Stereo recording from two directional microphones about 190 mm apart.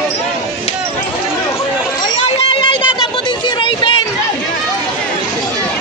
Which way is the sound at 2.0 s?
25° left (ahead or behind).